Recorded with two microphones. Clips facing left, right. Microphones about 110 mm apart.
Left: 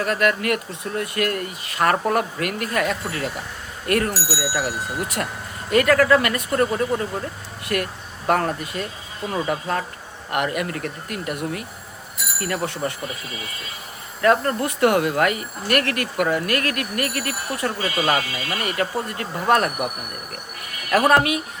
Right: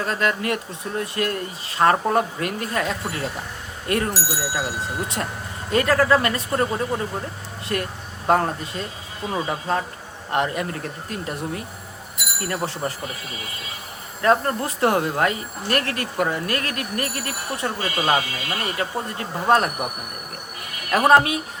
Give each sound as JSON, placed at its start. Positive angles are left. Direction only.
{"t": 0.0, "sound": "speech", "side_deg": -25}
{"t": 14.2, "sound": "speech", "side_deg": -25}
{"t": 20.9, "sound": "speech", "side_deg": -25}